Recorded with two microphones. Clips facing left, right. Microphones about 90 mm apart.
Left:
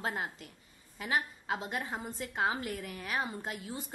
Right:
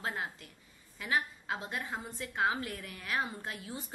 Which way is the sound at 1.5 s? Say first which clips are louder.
Left 2 dB; 20° left (ahead or behind).